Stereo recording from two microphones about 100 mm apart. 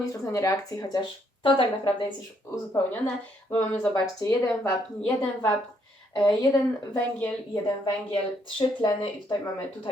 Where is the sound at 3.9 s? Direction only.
30° left (ahead or behind).